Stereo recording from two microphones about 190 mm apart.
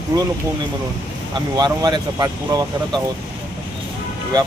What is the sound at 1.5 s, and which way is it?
Speech, 20° right (ahead or behind).